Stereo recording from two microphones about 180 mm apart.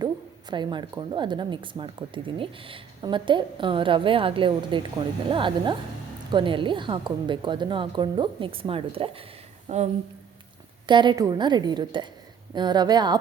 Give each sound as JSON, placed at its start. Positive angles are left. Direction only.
{"t": 0.5, "sound": "a woman's voice", "side_deg": -25}
{"t": 10.8, "sound": "speech", "side_deg": -25}